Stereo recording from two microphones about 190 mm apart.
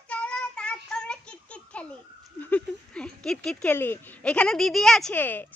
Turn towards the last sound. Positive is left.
turn(degrees=10)  # may be behind; listen again after turning